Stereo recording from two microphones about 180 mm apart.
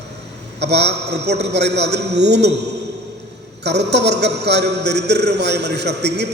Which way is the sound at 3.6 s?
70° right (ahead or behind).